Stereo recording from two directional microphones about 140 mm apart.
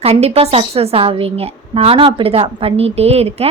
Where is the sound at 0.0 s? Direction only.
50° right (ahead or behind).